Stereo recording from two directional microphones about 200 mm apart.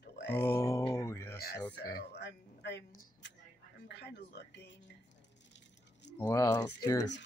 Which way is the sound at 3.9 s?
60° left (ahead or behind).